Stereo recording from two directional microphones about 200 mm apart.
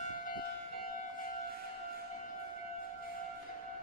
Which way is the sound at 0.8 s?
45° left (ahead or behind).